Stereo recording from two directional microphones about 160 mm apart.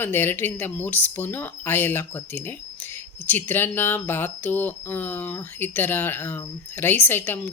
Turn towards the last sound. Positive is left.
turn(degrees=10)  # may be behind; listen again after turning